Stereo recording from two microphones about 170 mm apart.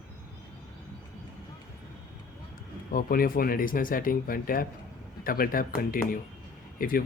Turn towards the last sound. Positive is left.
turn(degrees=55)  # may be behind; listen again after turning